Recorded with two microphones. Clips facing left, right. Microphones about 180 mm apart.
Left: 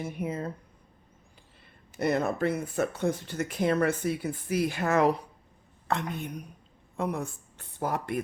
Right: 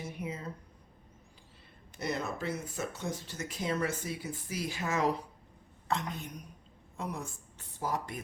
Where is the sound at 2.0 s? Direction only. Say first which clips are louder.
Left 9 dB; 55° left (ahead or behind).